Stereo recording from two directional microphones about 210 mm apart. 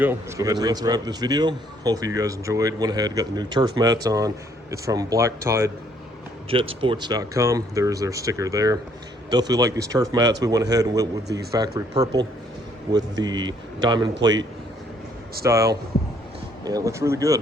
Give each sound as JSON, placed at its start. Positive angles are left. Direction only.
{"t": 0.0, "sound": "a man's voice", "side_deg": -10}
{"t": 6.5, "sound": "a man's voice", "side_deg": -25}
{"t": 15.4, "sound": "a man's voice", "side_deg": -15}